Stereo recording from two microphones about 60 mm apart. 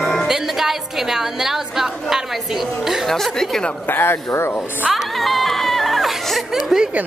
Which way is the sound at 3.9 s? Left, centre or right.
Left.